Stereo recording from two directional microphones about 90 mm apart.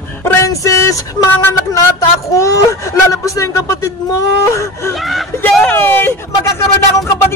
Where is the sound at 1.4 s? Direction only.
35° left (ahead or behind).